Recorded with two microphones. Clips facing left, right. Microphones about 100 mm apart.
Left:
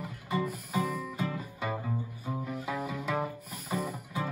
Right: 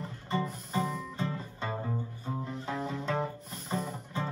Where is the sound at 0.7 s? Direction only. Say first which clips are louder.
Even; 25° right (ahead or behind).